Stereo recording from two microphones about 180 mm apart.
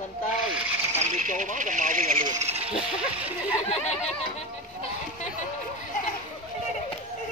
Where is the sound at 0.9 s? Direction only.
40° right (ahead or behind).